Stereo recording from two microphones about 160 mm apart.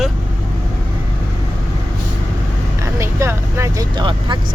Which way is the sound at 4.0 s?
30° right (ahead or behind).